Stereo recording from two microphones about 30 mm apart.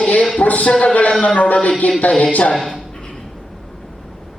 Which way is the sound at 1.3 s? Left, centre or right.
Left.